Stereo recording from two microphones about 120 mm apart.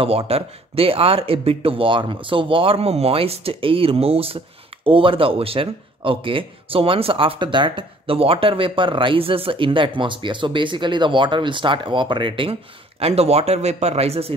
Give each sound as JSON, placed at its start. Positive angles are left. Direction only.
{"t": 0.0, "sound": "speech", "side_deg": -55}
{"t": 13.0, "sound": "speech", "side_deg": -60}